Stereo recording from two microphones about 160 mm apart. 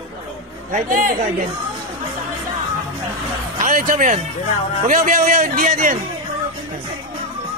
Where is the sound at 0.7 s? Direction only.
55° right (ahead or behind).